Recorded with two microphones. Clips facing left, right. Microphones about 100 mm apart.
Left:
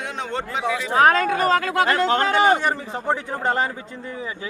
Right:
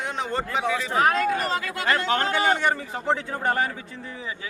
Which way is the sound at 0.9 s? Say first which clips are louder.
Left 6 dB; 45° left (ahead or behind).